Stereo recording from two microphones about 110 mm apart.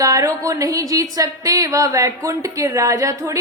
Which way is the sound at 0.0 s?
30° right (ahead or behind).